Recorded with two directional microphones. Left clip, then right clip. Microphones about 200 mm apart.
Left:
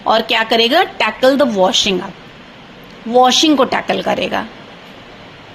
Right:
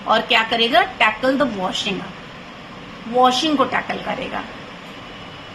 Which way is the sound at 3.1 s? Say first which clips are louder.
Left 5 dB; 50° left (ahead or behind).